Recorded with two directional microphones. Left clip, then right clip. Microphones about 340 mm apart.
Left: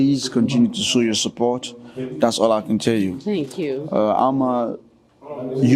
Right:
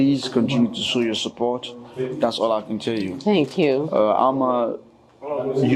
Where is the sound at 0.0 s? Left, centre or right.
Left.